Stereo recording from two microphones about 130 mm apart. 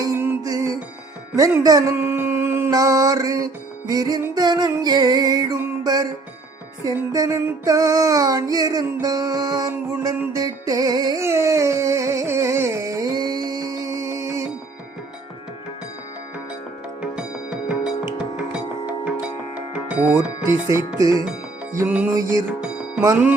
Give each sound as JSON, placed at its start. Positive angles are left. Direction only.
{"t": 0.0, "sound": "music", "side_deg": -20}
{"t": 1.4, "sound": "child singing", "side_deg": -30}
{"t": 2.0, "sound": "music", "side_deg": -15}
{"t": 4.4, "sound": "child singing", "side_deg": -30}
{"t": 5.8, "sound": "music", "side_deg": -30}
{"t": 6.8, "sound": "child singing", "side_deg": -25}
{"t": 10.3, "sound": "music", "side_deg": -30}
{"t": 17.0, "sound": "music", "side_deg": -5}
{"t": 20.4, "sound": "child singing", "side_deg": -20}
{"t": 21.8, "sound": "music", "side_deg": -10}
{"t": 22.1, "sound": "child singing", "side_deg": -25}
{"t": 22.6, "sound": "music", "side_deg": -5}